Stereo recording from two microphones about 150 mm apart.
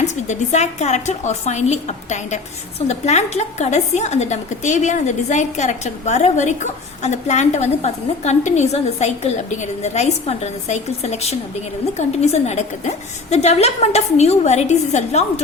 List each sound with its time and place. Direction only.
0.0 s a woman's voice: 50° left (ahead or behind)